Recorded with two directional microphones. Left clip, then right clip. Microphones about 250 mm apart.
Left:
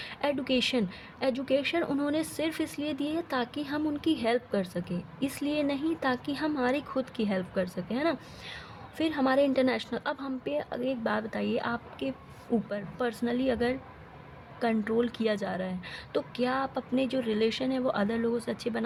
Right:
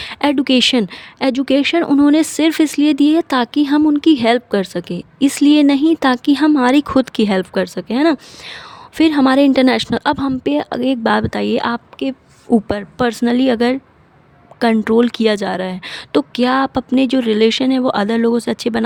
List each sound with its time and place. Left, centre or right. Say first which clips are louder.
0.0 s speech: right 14 dB; right